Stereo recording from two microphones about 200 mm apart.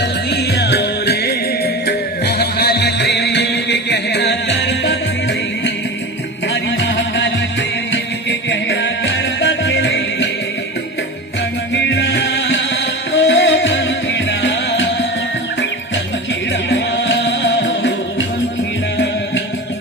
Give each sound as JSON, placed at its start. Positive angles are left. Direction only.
{"t": 0.0, "sound": "music", "side_deg": 55}
{"t": 6.5, "sound": "music", "side_deg": 65}
{"t": 11.7, "sound": "music", "side_deg": 60}
{"t": 16.6, "sound": "music", "side_deg": 65}